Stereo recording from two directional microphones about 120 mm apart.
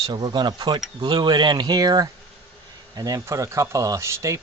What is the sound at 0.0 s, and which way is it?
Speech, 40° right (ahead or behind).